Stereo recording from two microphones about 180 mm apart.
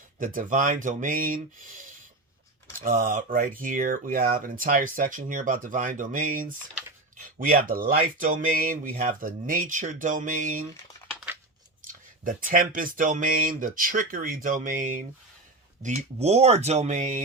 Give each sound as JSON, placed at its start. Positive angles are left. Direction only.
{"t": 0.2, "sound": "speech", "side_deg": -50}
{"t": 11.8, "sound": "speech", "side_deg": -50}